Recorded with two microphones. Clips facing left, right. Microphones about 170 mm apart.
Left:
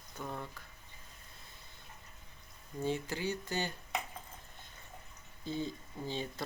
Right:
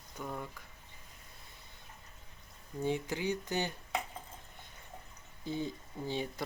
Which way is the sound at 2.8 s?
15° right (ahead or behind).